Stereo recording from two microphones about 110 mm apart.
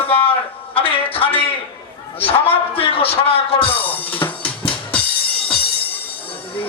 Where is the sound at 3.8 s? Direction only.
15° left (ahead or behind).